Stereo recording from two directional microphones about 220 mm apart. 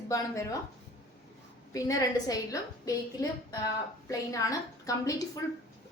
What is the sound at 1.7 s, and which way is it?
A woman's voice, 15° left (ahead or behind).